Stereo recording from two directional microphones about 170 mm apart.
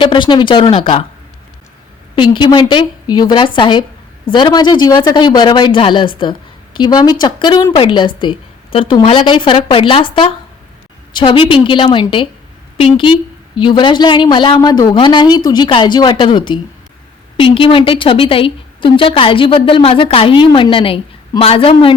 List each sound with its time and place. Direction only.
0.0 s speech: 30° left (ahead or behind)
2.1 s a woman's voice: 30° left (ahead or behind)